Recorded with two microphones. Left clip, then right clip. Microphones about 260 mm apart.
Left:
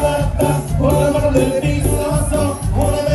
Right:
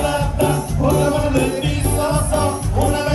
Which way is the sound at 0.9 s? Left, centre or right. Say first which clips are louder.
Left 3 dB; centre.